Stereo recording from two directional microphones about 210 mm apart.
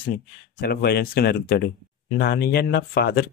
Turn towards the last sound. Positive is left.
turn(degrees=45)  # may be behind; listen again after turning